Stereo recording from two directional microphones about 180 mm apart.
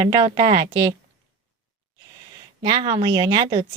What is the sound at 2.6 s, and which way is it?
Speech, 25° right (ahead or behind).